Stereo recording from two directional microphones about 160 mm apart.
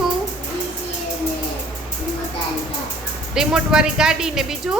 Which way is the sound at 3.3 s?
5° right (ahead or behind).